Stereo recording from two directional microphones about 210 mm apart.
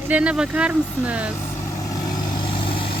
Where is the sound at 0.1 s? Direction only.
5° right (ahead or behind).